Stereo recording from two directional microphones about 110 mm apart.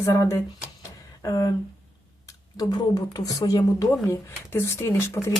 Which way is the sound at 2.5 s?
40° left (ahead or behind).